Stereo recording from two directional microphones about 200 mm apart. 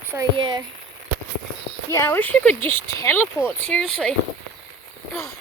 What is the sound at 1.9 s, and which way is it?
Speech, 10° left (ahead or behind).